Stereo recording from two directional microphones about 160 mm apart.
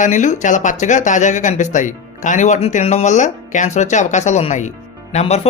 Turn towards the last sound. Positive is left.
turn(degrees=40)  # may be behind; listen again after turning